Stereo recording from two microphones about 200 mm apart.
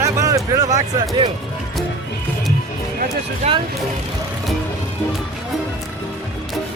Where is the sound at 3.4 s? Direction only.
35° right (ahead or behind).